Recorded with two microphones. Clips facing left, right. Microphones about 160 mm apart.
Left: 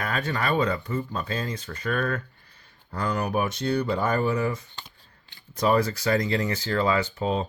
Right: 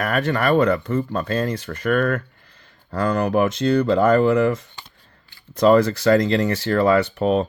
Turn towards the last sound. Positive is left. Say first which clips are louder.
# right 7 dB
turn(degrees=-70)  # may be behind; listen again after turning